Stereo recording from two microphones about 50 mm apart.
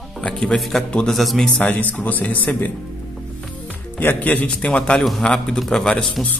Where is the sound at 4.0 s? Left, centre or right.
Left.